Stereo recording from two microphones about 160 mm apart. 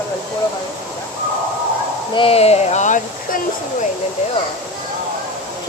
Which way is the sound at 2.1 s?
35° left (ahead or behind).